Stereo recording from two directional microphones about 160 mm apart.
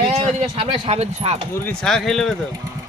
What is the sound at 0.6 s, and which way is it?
Speech, 40° right (ahead or behind).